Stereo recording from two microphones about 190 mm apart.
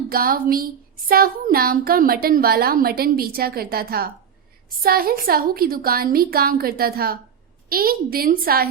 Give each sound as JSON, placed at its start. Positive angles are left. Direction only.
{"t": 0.1, "sound": "speech", "side_deg": -50}